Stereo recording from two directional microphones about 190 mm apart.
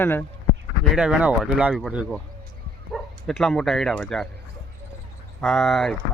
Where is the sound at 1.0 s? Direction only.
5° right (ahead or behind).